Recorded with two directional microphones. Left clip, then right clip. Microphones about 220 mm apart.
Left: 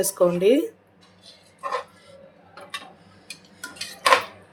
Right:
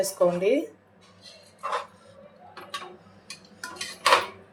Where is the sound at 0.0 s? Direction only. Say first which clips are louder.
Left 3 dB; 30° left (ahead or behind).